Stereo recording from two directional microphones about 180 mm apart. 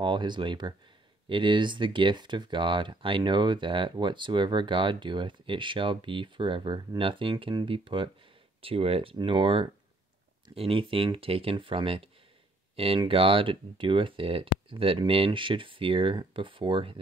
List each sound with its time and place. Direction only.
0.0 s speech: 25° right (ahead or behind)